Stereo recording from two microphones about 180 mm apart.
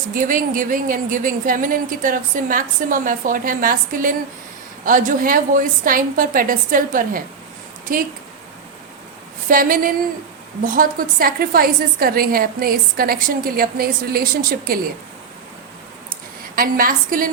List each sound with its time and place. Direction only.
0.1 s a woman's voice: 50° right (ahead or behind)
9.5 s a woman's voice: 50° right (ahead or behind)
16.6 s a woman's voice: 50° right (ahead or behind)